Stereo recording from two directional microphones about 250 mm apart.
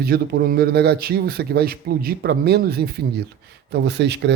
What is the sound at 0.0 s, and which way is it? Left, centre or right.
A man's voice, right.